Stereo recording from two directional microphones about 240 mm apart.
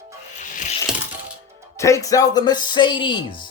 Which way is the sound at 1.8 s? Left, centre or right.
Centre.